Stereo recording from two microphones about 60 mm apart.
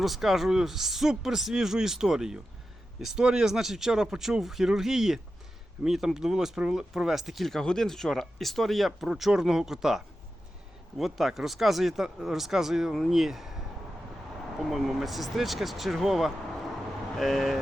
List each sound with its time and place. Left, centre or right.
0.0 s speech: centre
14.6 s speech: centre